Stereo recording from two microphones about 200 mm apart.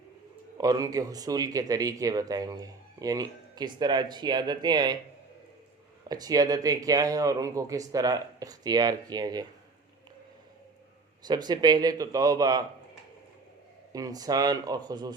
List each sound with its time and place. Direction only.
0.6 s speech: 20° right (ahead or behind)
6.1 s speech: 20° right (ahead or behind)
11.3 s speech: 20° right (ahead or behind)
13.9 s speech: 20° right (ahead or behind)